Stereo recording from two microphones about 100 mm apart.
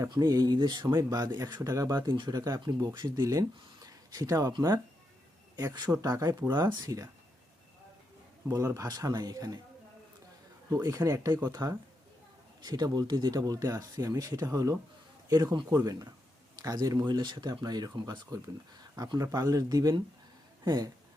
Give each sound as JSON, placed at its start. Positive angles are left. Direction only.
{"t": 0.1, "sound": "speech", "side_deg": -40}
{"t": 3.8, "sound": "a sound", "side_deg": -35}
{"t": 4.5, "sound": "speech", "side_deg": -45}
{"t": 8.4, "sound": "speech", "side_deg": -35}
{"t": 10.8, "sound": "speech", "side_deg": -35}